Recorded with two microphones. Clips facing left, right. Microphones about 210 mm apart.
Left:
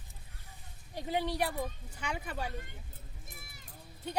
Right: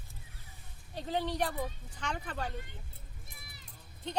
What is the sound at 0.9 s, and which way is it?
Speech, 10° left (ahead or behind).